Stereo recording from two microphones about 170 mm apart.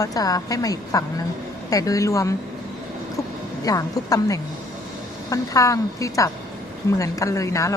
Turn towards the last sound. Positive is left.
turn(degrees=20)  # may be behind; listen again after turning